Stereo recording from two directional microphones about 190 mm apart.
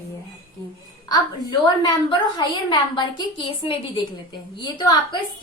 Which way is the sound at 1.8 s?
25° left (ahead or behind).